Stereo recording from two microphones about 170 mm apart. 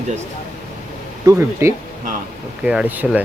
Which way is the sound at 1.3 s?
15° right (ahead or behind).